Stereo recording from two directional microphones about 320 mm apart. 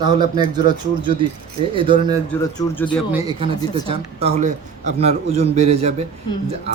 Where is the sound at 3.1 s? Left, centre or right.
Centre.